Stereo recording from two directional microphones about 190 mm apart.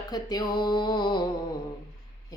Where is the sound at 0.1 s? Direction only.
20° left (ahead or behind).